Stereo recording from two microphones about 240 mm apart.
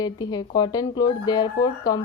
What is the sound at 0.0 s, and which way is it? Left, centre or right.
Speech, centre.